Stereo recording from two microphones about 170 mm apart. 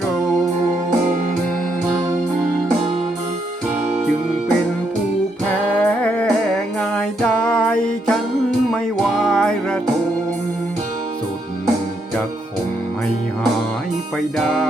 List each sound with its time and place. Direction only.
5.8 s music: 5° left (ahead or behind)
14.3 s music: centre (ahead or behind)